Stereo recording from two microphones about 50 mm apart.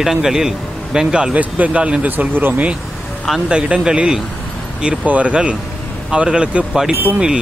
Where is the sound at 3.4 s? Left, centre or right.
Right.